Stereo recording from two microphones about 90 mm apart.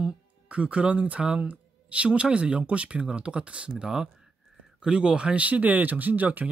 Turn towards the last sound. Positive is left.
turn(degrees=-20)  # may be behind; listen again after turning